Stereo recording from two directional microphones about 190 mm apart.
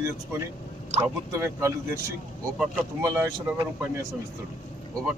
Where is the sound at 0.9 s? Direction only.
35° right (ahead or behind).